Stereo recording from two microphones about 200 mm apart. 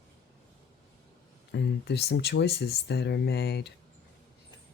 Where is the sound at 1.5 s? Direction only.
55° left (ahead or behind).